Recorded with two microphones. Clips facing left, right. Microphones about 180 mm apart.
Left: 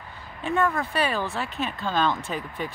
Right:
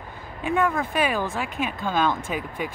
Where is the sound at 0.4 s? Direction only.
10° right (ahead or behind).